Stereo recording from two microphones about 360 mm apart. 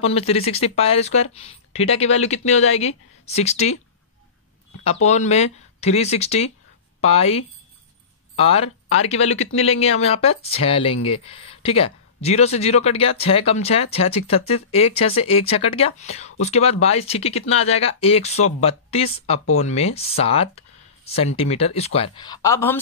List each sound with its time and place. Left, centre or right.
0.0 s speech: centre
5.0 s speech: centre